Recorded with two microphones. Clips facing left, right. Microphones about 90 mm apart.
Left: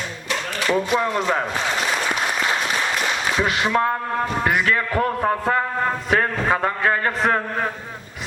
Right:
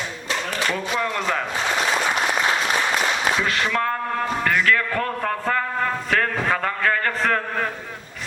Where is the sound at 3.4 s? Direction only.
20° left (ahead or behind).